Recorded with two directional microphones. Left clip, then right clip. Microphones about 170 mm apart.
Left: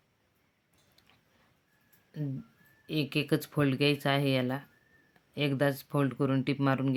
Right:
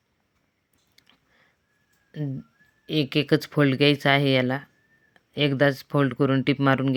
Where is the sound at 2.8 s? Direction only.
35° right (ahead or behind).